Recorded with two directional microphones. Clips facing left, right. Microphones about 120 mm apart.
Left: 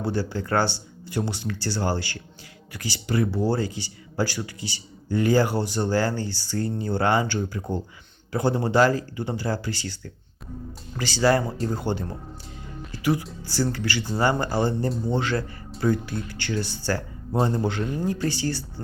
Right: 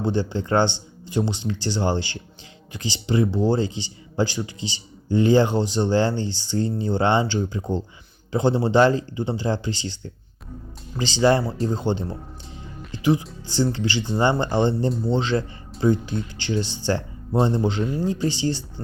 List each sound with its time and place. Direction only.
0.0 s speech: 20° right (ahead or behind)